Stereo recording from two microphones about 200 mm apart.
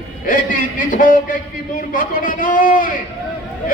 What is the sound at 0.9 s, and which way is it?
A man's voice, 45° left (ahead or behind).